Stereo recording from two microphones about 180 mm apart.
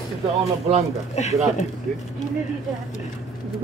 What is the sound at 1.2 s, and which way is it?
Speech, 40° left (ahead or behind).